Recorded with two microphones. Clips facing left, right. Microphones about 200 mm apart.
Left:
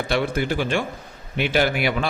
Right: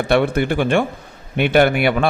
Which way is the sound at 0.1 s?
60° right (ahead or behind).